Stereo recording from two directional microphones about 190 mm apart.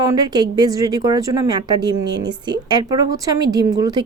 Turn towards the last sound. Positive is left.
turn(degrees=-20)  # may be behind; listen again after turning